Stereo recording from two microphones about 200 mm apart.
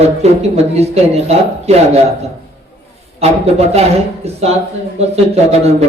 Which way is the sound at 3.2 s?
30° right (ahead or behind).